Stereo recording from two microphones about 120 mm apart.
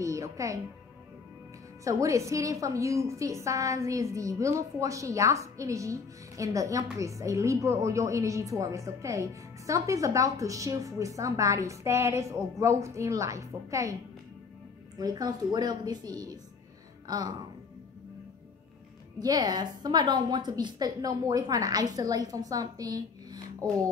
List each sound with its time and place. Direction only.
0.0 s a woman's voice: 25° right (ahead or behind)
1.9 s a woman's voice: 25° right (ahead or behind)
15.0 s a woman's voice: 30° right (ahead or behind)
19.1 s a woman's voice: 30° right (ahead or behind)